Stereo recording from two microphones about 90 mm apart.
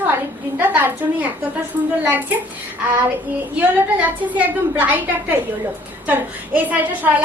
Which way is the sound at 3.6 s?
15° right (ahead or behind).